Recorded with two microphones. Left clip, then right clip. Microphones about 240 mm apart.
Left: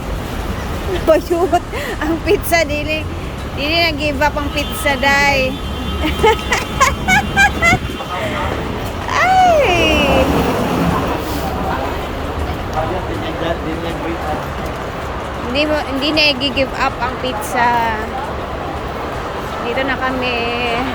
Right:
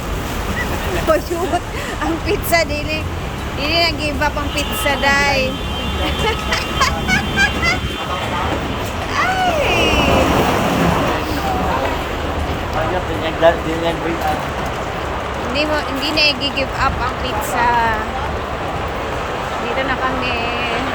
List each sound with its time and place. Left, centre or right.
1.1 s speech: centre
9.1 s a sound: centre
13.4 s speech: centre
15.5 s speech: centre
19.9 s speech: centre